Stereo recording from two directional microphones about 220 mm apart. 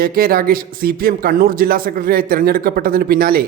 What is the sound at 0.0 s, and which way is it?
Speech, 40° right (ahead or behind).